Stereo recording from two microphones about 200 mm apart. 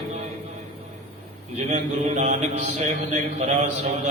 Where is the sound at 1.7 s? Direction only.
35° right (ahead or behind).